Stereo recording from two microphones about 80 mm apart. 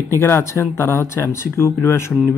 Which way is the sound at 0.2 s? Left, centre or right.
Left.